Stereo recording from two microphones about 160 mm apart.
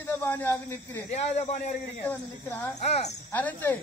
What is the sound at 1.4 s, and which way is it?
Speech, 45° left (ahead or behind).